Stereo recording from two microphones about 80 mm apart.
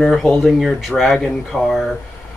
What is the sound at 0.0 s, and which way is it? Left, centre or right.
Speech, centre.